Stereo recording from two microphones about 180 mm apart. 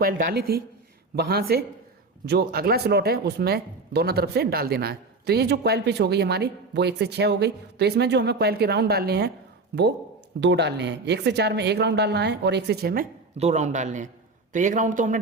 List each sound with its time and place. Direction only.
0.0 s speech: 55° right (ahead or behind)
10.4 s a woman's voice: 75° right (ahead or behind); by 13.1 s 55° right (ahead or behind)
13.3 s a man's voice: 40° right (ahead or behind)